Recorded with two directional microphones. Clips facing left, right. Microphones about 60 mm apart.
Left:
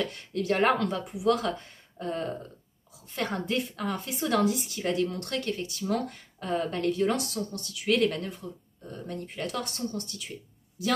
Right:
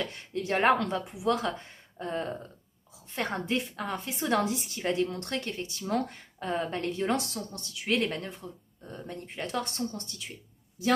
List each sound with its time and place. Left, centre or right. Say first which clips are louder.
0.0 s a woman's voice: left 3 dB; right